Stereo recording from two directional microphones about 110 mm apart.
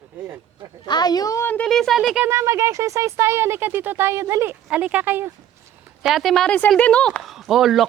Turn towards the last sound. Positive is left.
turn(degrees=0)  # may be behind; listen again after turning